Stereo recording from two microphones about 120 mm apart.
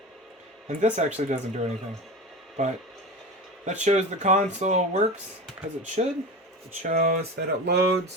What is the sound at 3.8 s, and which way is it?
Speech, 70° right (ahead or behind).